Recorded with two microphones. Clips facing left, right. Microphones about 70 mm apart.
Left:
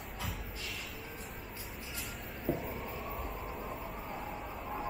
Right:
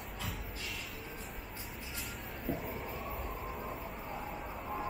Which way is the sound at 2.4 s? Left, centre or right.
Centre.